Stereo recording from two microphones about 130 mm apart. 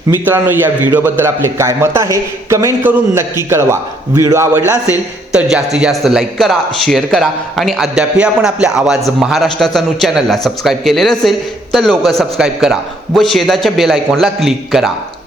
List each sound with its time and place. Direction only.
0.3 s a man's voice: 15° right (ahead or behind)
5.3 s a man's voice: 5° right (ahead or behind)